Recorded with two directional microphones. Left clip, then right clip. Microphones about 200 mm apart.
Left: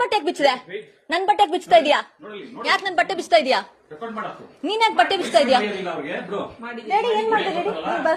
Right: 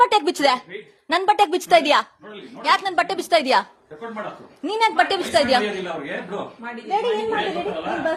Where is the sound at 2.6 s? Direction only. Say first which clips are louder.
Right 1 dB; 10° right (ahead or behind).